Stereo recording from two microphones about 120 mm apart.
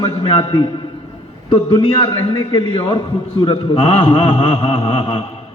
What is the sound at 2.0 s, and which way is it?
A man's voice, 45° left (ahead or behind).